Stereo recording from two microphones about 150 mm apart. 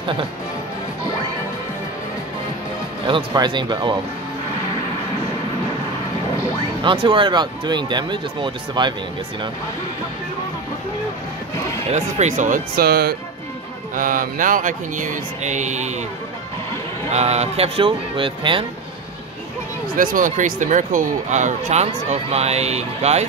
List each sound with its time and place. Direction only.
3.1 s speech: 30° right (ahead or behind)
6.8 s speech: 35° right (ahead or behind)
11.9 s speech: 50° right (ahead or behind); by 13.1 s 90° right
13.9 s speech: 65° right (ahead or behind)
17.1 s speech: 45° right (ahead or behind)
20.0 s speech: 65° right (ahead or behind); by 23.2 s 45° right (ahead or behind)